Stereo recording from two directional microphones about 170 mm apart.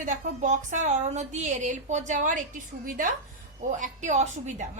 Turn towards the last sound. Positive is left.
turn(degrees=-45)  # may be behind; listen again after turning